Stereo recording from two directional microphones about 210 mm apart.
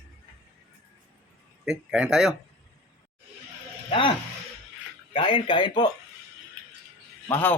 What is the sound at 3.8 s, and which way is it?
Speech, 25° left (ahead or behind).